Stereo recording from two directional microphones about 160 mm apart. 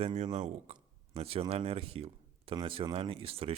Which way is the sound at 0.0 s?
40° right (ahead or behind).